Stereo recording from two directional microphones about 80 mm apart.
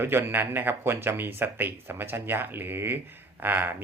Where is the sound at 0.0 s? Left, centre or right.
Right.